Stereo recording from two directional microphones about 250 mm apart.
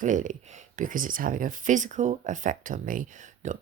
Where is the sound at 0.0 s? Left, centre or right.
Right.